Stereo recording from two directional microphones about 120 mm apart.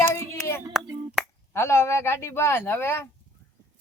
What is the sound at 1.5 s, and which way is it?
Speech, 20° left (ahead or behind).